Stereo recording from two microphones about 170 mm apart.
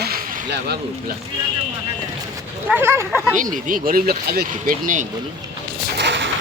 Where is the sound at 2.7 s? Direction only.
10° right (ahead or behind).